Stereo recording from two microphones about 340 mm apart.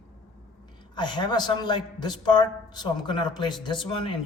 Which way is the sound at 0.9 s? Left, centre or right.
Centre.